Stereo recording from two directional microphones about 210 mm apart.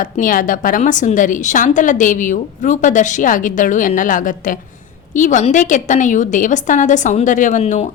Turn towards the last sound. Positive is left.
turn(degrees=35)  # may be behind; listen again after turning